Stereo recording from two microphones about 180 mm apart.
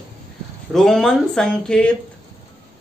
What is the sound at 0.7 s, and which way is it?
Speech, centre (ahead or behind).